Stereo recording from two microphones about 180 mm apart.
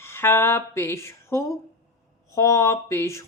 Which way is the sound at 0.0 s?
15° left (ahead or behind).